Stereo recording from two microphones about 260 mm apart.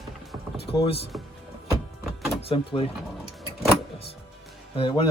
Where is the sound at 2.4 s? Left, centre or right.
Left.